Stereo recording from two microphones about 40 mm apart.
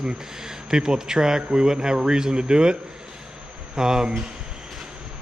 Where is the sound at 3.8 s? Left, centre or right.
Centre.